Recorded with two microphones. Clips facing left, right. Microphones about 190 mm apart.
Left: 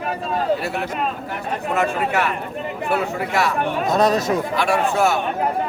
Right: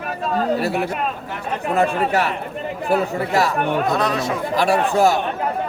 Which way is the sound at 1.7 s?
35° right (ahead or behind).